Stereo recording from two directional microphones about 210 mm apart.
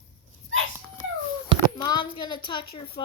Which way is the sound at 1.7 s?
20° left (ahead or behind).